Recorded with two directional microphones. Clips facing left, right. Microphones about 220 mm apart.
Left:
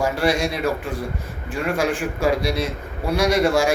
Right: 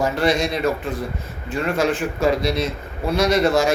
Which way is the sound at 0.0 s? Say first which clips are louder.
Right 1 dB; 10° left (ahead or behind).